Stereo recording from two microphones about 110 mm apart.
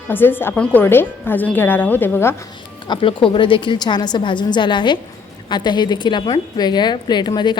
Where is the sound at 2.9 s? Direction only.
50° left (ahead or behind).